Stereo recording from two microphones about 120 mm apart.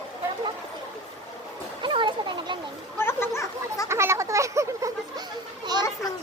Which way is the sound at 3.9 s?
25° right (ahead or behind).